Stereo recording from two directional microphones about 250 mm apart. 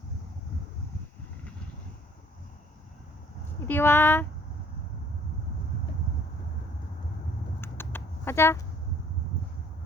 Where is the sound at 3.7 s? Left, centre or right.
Centre.